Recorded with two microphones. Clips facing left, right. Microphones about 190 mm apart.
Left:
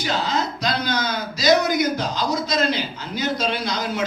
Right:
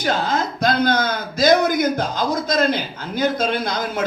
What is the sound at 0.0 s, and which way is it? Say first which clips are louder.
A man's voice: right 3 dB; 50° right (ahead or behind).